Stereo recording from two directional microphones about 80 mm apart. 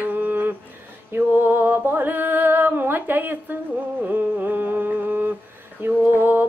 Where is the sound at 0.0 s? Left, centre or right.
Right.